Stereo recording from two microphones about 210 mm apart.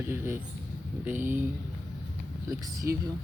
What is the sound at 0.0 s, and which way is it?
Speech, 10° right (ahead or behind).